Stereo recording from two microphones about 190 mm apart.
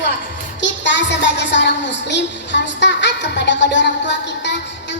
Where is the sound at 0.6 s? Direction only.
70° left (ahead or behind).